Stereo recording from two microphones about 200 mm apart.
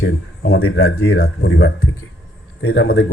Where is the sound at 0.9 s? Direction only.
55° left (ahead or behind).